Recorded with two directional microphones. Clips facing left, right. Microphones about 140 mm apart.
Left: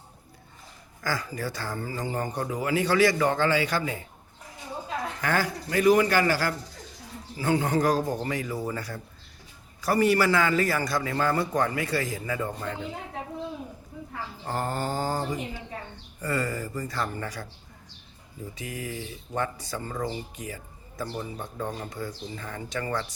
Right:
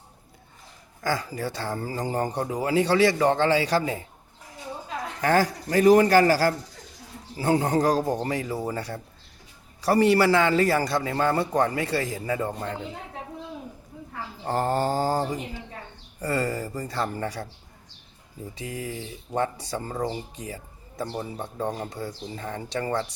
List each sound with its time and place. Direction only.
1.0 s speech: 25° right (ahead or behind)
5.2 s speech: 35° right (ahead or behind)
14.4 s speech: 35° right (ahead or behind)
18.5 s speech: 30° right (ahead or behind)